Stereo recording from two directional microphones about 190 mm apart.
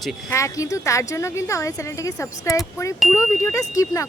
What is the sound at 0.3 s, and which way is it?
A woman's voice, 15° left (ahead or behind).